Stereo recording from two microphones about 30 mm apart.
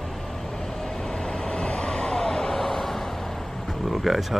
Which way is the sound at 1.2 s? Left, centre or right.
Left.